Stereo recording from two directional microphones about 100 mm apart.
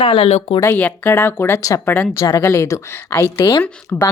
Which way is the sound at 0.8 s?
15° left (ahead or behind).